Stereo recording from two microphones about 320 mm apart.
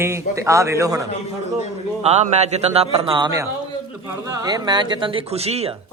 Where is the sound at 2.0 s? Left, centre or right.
Right.